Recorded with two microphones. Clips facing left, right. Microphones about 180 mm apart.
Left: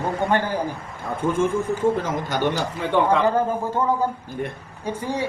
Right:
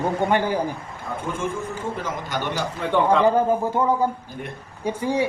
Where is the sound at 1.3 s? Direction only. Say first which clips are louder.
Left 8 dB; 50° left (ahead or behind).